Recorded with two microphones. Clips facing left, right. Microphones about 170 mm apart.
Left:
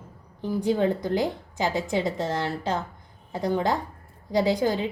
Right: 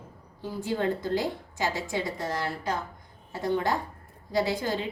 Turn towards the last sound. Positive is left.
turn(degrees=15)  # may be behind; listen again after turning